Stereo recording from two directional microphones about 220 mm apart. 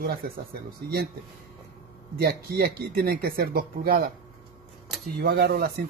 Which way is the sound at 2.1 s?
45° right (ahead or behind).